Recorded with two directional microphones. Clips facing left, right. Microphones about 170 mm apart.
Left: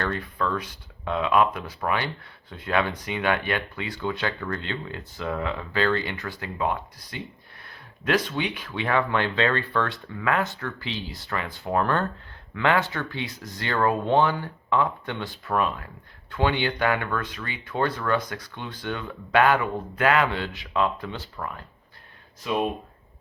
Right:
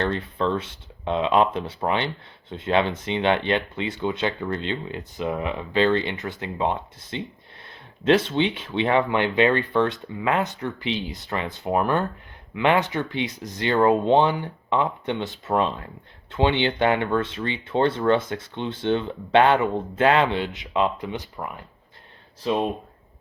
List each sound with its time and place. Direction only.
0.0 s speech: 25° right (ahead or behind)
22.4 s speech: 30° right (ahead or behind)